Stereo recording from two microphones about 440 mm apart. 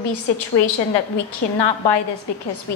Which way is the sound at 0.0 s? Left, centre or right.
Left.